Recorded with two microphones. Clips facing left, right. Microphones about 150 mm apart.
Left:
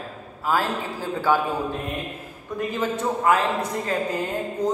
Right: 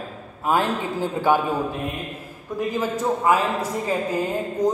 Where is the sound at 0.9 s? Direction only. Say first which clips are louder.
Right 2 dB; 20° right (ahead or behind).